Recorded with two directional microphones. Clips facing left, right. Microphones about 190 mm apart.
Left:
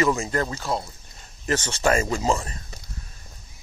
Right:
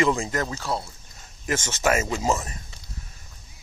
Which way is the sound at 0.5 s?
15° left (ahead or behind).